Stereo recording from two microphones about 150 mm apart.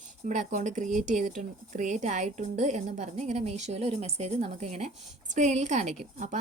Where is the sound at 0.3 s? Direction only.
55° right (ahead or behind).